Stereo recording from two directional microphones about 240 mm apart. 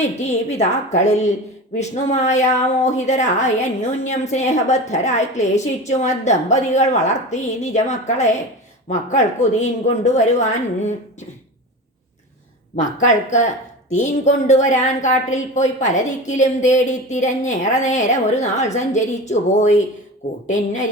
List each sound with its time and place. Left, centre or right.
0.2 s a woman's voice: left
12.7 s a woman's voice: left